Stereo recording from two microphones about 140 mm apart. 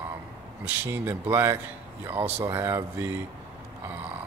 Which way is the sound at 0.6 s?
15° right (ahead or behind).